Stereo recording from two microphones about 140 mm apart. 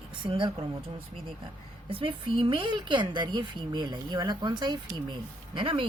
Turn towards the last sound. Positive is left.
turn(degrees=-40)  # may be behind; listen again after turning